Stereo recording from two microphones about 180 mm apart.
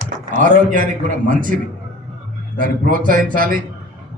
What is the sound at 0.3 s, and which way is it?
A man's voice, 50° right (ahead or behind).